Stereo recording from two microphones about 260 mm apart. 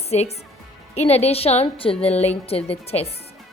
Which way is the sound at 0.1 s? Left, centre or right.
Left.